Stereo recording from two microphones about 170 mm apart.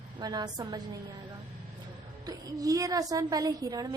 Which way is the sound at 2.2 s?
20° right (ahead or behind).